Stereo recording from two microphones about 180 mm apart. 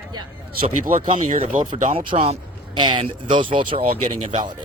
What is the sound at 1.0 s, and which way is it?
A man's voice, 35° right (ahead or behind).